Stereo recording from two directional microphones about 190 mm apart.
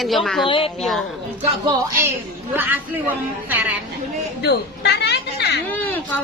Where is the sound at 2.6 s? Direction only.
10° right (ahead or behind).